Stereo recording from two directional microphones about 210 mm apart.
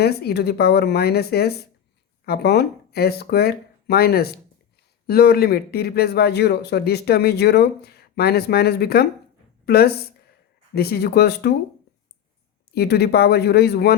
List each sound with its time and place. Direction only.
0.0 s a woman's voice: 50° left (ahead or behind)
12.7 s speech: 50° left (ahead or behind)